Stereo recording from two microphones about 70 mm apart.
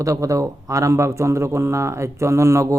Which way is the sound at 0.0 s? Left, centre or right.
Right.